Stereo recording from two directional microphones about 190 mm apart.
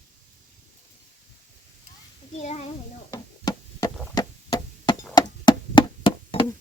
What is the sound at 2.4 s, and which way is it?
Speech, 35° left (ahead or behind).